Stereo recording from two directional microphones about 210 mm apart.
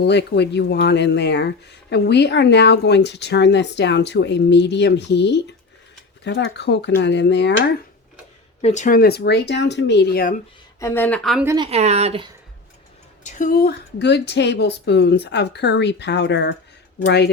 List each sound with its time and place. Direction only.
0.0 s speech: 55° left (ahead or behind)
8.6 s speech: 35° left (ahead or behind)
10.8 s speech: 10° left (ahead or behind)
11.4 s speech: 20° right (ahead or behind)
13.2 s speech: 40° left (ahead or behind)